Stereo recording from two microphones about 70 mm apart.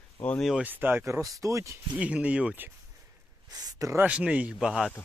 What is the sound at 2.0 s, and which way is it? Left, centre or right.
Speech, centre.